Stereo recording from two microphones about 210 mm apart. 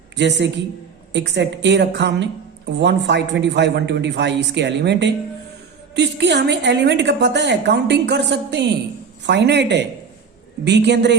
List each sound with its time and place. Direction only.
0.2 s a woman's voice: 55° right (ahead or behind)